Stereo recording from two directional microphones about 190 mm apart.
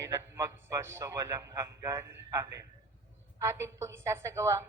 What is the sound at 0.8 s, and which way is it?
A woman's voice, 15° right (ahead or behind).